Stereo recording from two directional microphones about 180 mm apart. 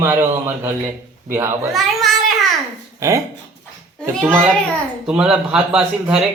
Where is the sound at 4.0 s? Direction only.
5° left (ahead or behind).